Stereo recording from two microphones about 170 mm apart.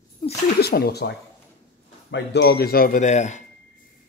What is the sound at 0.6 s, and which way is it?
Speech, 65° left (ahead or behind).